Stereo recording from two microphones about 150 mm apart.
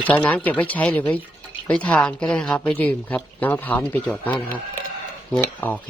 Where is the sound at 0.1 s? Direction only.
10° left (ahead or behind).